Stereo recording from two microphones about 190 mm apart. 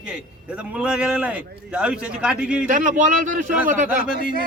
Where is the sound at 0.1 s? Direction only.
5° right (ahead or behind).